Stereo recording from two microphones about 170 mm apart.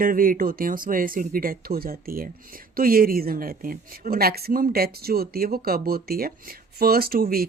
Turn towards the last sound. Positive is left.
turn(degrees=-60)  # may be behind; listen again after turning